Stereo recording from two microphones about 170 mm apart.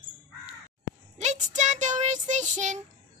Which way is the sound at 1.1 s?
45° right (ahead or behind).